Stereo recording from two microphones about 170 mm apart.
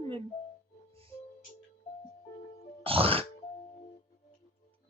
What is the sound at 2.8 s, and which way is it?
Grunt, 35° right (ahead or behind).